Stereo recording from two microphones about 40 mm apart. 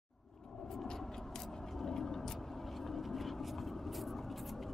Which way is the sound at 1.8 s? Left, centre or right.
Centre.